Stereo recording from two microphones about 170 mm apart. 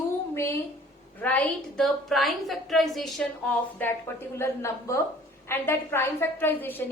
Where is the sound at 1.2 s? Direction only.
10° left (ahead or behind).